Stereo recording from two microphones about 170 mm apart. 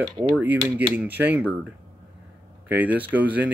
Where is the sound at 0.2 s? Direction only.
10° right (ahead or behind).